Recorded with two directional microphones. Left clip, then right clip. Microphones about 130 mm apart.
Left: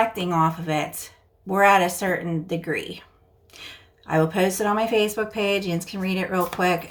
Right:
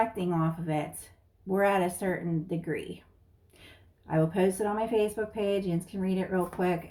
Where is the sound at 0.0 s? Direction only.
25° left (ahead or behind).